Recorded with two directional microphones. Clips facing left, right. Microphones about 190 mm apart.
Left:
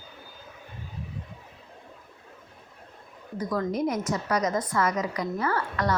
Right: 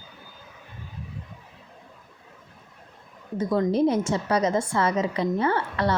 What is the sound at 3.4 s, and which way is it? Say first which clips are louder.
A woman's voice: right 5 dB; 25° right (ahead or behind).